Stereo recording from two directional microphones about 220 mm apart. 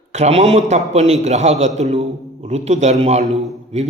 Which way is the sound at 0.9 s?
30° right (ahead or behind).